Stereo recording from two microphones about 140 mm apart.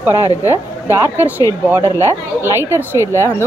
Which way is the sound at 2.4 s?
15° right (ahead or behind).